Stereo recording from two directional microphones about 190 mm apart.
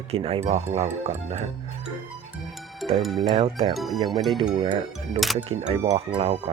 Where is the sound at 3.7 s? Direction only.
Centre (ahead or behind).